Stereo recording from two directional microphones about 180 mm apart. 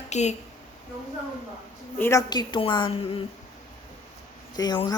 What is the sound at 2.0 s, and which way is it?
Speech, 15° left (ahead or behind).